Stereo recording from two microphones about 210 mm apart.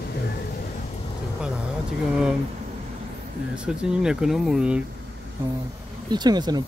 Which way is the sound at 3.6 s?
5° right (ahead or behind).